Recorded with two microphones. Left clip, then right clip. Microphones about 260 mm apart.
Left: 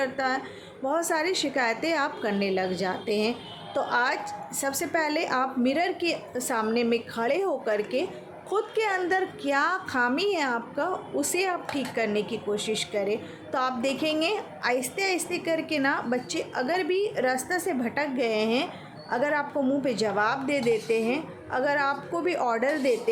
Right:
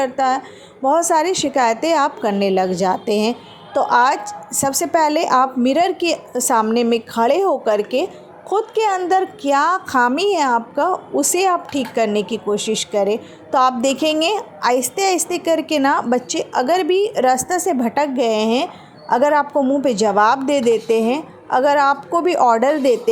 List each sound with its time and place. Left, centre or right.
0.0 s a woman's voice: right